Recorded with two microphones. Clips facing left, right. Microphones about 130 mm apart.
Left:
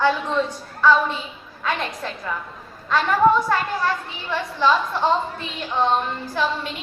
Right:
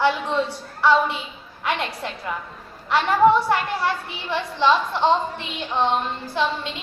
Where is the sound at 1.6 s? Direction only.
15° right (ahead or behind).